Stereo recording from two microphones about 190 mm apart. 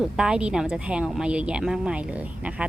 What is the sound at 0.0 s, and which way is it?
A woman's voice, 5° right (ahead or behind).